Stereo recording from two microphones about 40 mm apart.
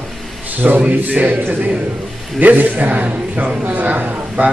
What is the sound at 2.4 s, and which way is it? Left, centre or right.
A woman's voice, right.